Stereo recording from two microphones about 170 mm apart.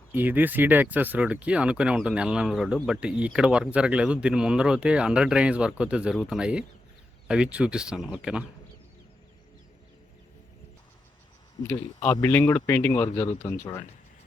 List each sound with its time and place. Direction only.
0.1 s speech: 10° right (ahead or behind)
11.7 s speech: 20° left (ahead or behind)